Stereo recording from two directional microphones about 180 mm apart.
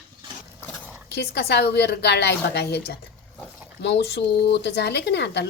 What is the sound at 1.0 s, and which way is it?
A woman's voice, 65° left (ahead or behind).